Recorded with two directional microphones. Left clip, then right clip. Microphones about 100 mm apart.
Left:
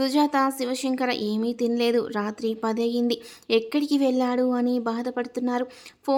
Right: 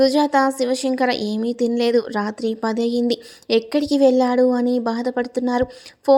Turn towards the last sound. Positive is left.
turn(degrees=-35)  # may be behind; listen again after turning